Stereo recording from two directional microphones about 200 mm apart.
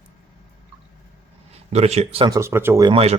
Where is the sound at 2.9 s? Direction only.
30° right (ahead or behind).